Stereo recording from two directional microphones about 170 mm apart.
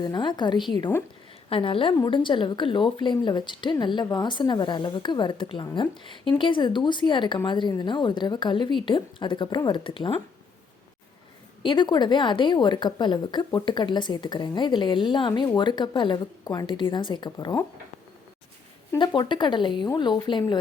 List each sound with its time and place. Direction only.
0.0 s a woman's voice: 25° left (ahead or behind)
11.6 s a woman's voice: 30° left (ahead or behind)
18.9 s a woman's voice: 25° left (ahead or behind)